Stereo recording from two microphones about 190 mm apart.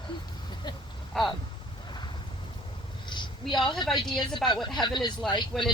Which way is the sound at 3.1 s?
25° left (ahead or behind).